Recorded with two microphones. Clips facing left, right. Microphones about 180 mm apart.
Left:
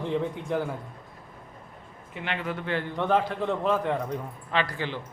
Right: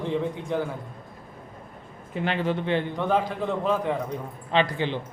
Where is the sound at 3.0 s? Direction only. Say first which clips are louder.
Even; centre (ahead or behind).